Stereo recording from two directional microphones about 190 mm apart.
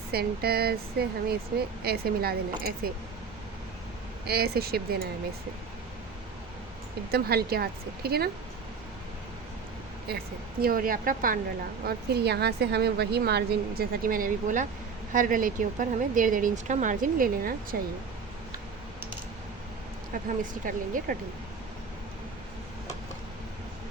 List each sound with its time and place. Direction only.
0.1 s a woman's voice: 55° right (ahead or behind)
4.3 s a woman's voice: 55° right (ahead or behind)
7.1 s a woman's voice: 55° right (ahead or behind)
10.1 s a woman's voice: 55° right (ahead or behind)
11.9 s a woman's voice: 60° right (ahead or behind)
20.4 s speech: 45° right (ahead or behind)